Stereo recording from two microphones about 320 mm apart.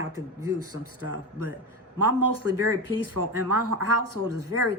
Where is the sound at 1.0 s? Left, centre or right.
Right.